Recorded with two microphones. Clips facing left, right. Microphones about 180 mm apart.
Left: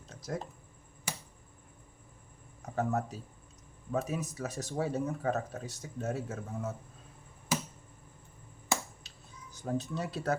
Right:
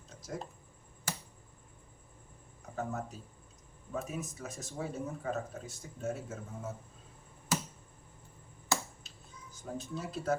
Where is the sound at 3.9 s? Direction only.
70° left (ahead or behind).